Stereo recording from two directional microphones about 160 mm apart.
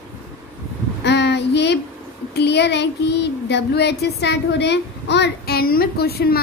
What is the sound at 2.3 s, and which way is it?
Speech, 90° left.